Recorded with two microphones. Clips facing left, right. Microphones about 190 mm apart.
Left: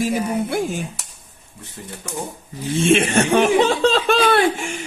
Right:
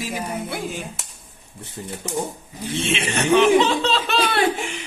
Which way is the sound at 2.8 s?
50° left (ahead or behind).